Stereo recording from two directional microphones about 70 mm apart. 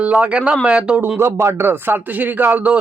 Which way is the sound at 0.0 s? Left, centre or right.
Centre.